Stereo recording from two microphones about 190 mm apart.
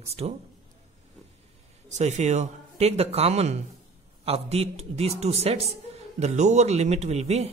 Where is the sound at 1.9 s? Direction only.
40° right (ahead or behind).